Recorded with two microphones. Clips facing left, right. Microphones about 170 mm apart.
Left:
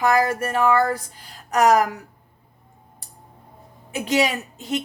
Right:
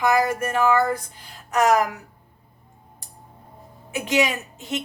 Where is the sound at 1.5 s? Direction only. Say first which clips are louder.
Left 2 dB; 40° left (ahead or behind).